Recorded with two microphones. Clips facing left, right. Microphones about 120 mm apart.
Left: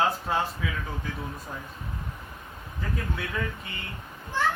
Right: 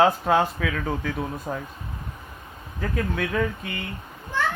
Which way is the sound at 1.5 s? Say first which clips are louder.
Right 8 dB; 55° right (ahead or behind).